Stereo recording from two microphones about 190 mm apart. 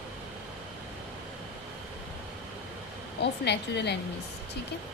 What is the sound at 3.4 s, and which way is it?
Speech, 65° left (ahead or behind).